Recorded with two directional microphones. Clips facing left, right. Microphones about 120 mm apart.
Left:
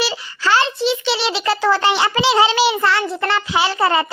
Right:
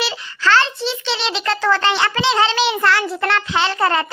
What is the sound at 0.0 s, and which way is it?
A child's voice, 10° left (ahead or behind).